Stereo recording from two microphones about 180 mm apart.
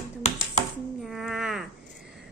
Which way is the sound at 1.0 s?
Centre (ahead or behind).